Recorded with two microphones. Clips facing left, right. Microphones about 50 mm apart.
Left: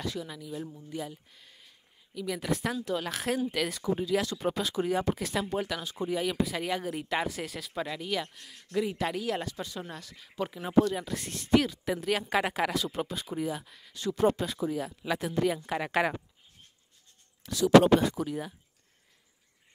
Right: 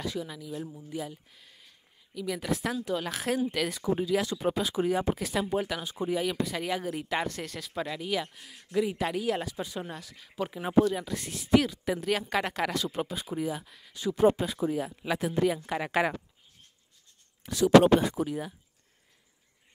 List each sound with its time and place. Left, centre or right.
0.0 s a woman's voice: centre
9.9 s a woman's voice: centre
10.5 s speech: centre
10.9 s a woman's voice: centre
17.4 s speech: right
18.0 s speech: centre